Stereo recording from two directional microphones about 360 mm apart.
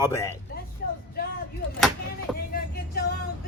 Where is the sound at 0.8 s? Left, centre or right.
Left.